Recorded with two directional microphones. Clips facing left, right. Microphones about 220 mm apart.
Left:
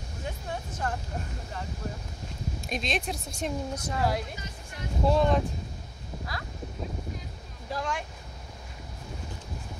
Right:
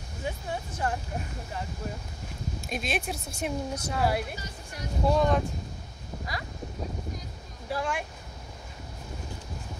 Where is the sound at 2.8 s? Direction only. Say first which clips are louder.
Even; 5° right (ahead or behind).